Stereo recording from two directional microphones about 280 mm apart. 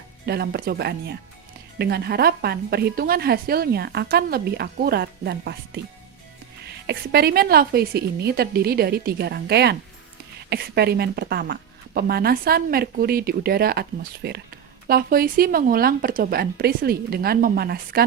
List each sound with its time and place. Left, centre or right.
0.3 s a woman's voice: right
6.8 s a woman's voice: right